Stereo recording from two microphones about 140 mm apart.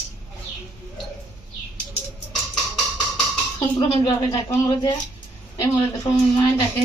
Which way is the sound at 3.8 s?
30° left (ahead or behind).